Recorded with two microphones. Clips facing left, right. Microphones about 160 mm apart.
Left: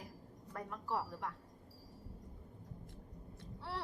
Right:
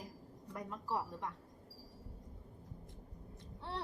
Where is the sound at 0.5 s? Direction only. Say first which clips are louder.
Even; 15° right (ahead or behind).